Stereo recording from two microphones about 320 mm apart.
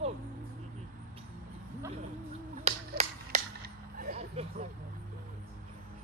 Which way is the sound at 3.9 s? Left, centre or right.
Right.